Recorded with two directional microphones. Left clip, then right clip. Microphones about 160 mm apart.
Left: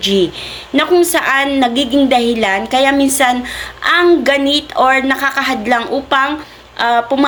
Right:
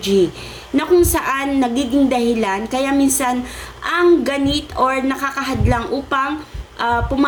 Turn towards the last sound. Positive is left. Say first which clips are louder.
# left 5 dB
turn(degrees=-20)  # may be behind; listen again after turning